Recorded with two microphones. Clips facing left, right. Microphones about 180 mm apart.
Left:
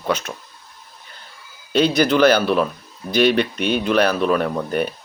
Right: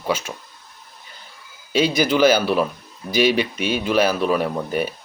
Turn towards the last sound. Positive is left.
turn(degrees=-5)  # may be behind; listen again after turning